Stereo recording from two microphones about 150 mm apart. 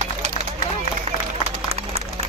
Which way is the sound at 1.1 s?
40° right (ahead or behind).